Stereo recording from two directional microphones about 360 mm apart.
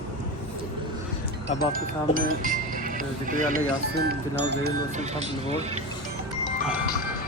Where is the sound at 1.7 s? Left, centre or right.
Right.